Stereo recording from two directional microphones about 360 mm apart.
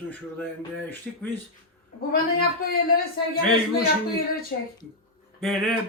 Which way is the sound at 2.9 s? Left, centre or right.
Left.